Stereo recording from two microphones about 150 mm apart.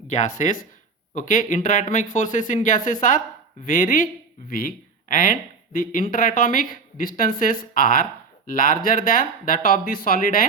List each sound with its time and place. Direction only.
0.1 s speech: 55° left (ahead or behind)